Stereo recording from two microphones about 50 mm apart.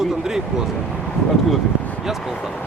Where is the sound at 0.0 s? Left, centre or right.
Centre.